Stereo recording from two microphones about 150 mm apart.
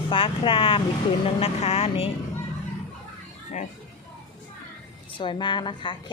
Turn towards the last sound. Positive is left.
turn(degrees=30)  # may be behind; listen again after turning